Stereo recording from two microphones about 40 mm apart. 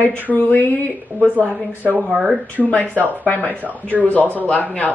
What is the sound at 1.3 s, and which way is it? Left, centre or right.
Speech, right.